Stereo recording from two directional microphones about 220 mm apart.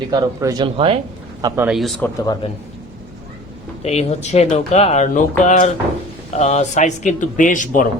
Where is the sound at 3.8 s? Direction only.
30° left (ahead or behind).